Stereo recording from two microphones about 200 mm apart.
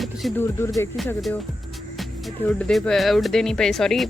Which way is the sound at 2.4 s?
5° left (ahead or behind).